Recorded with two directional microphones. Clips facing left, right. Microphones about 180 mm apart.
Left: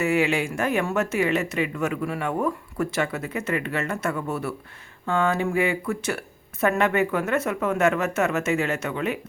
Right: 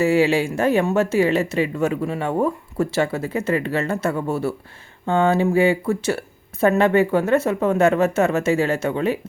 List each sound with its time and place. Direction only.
0.0 s speech: 30° right (ahead or behind)